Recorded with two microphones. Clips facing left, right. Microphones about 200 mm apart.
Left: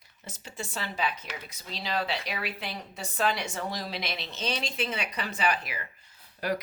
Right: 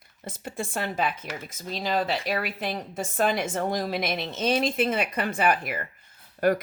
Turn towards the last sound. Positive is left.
turn(degrees=-50)  # may be behind; listen again after turning